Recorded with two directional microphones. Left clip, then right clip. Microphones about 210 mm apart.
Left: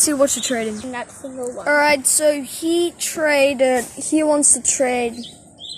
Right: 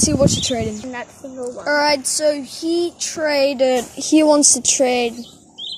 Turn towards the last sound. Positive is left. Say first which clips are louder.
# right 2 dB
turn(degrees=-30)  # may be behind; listen again after turning